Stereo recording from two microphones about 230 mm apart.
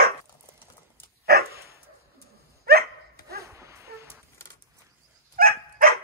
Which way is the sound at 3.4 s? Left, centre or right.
Centre.